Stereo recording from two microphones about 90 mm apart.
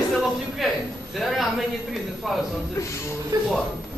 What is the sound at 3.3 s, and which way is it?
Speech, 45° right (ahead or behind).